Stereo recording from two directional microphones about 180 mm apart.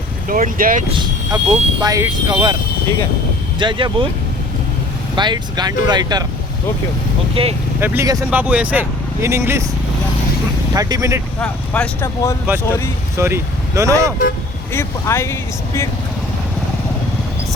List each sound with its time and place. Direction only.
0.3 s speech: 50° right (ahead or behind)
0.9 s speech: 30° right (ahead or behind)
3.6 s speech: 25° right (ahead or behind)
5.1 s speech: 25° right (ahead or behind)
7.4 s speech: 30° right (ahead or behind)
7.8 s speech: 15° right (ahead or behind)
10.8 s speech: 20° right (ahead or behind)
11.3 s speech: 5° left (ahead or behind)
13.1 s speech: 15° right (ahead or behind)
14.7 s speech: 15° left (ahead or behind)